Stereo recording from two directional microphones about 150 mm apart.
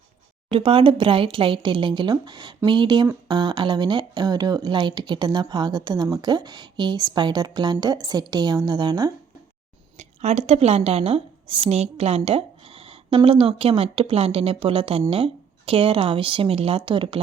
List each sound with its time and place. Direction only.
0.5 s a woman's voice: 35° right (ahead or behind)
10.0 s a woman's voice: 45° right (ahead or behind)